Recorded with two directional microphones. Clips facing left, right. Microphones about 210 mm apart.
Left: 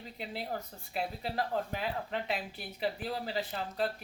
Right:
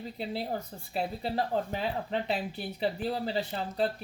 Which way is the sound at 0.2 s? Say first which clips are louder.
Right 4 dB; 30° right (ahead or behind).